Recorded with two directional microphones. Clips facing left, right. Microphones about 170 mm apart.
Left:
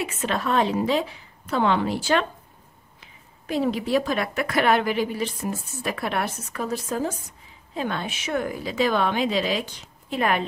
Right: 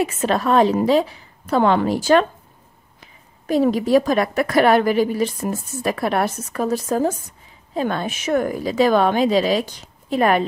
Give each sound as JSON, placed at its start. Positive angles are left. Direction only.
{"t": 0.0, "sound": "a woman's voice", "side_deg": -40}